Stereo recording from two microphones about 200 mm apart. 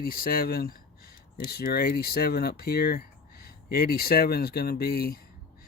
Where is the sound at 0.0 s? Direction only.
45° left (ahead or behind).